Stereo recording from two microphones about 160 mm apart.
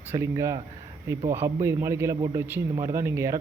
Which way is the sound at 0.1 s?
15° right (ahead or behind).